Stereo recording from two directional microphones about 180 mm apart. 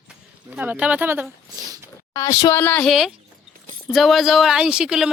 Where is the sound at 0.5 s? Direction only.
10° right (ahead or behind).